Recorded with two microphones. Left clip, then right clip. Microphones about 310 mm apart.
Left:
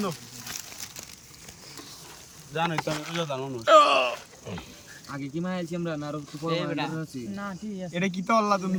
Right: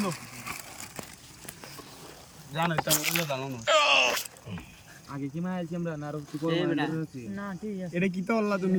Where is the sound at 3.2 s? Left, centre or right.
Left.